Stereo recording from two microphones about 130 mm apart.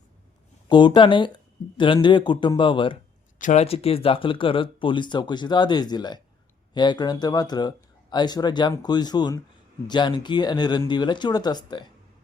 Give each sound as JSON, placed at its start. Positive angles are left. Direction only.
{"t": 0.7, "sound": "speech", "side_deg": 35}
{"t": 3.3, "sound": "a sound", "side_deg": 85}
{"t": 3.6, "sound": "speech", "side_deg": 50}